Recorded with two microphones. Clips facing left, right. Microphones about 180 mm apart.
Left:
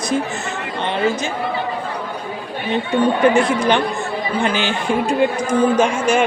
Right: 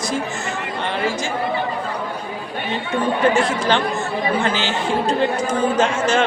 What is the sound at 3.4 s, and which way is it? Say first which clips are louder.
Speech: left 3 dB; 15° left (ahead or behind).